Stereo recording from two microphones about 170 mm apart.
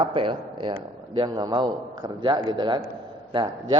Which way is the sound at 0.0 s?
30° right (ahead or behind).